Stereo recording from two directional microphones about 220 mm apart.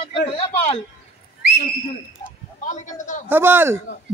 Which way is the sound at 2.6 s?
35° left (ahead or behind).